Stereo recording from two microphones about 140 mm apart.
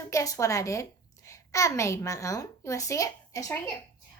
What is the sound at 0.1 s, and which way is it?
A woman's voice, 25° left (ahead or behind).